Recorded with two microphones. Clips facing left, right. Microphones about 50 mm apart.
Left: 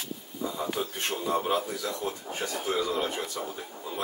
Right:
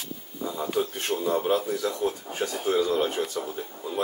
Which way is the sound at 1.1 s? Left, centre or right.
Centre.